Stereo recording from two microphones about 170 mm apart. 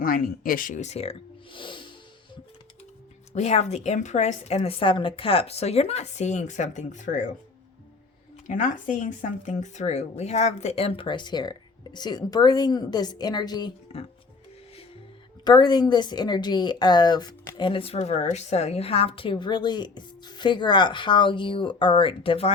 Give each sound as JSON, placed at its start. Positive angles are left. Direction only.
{"t": 0.0, "sound": "speech", "side_deg": 55}
{"t": 1.5, "sound": "music", "side_deg": 30}
{"t": 3.3, "sound": "a woman's voice", "side_deg": 40}
{"t": 8.4, "sound": "speech", "side_deg": 50}
{"t": 15.4, "sound": "speech", "side_deg": 25}